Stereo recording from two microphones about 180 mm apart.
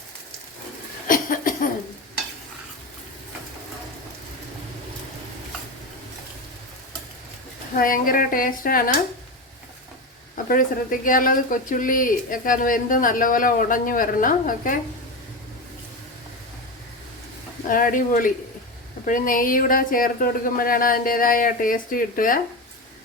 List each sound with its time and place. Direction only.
1.0 s a sound: 50° left (ahead or behind)
7.7 s speech: 50° left (ahead or behind)
10.3 s speech: 50° left (ahead or behind)
17.7 s speech: 50° left (ahead or behind)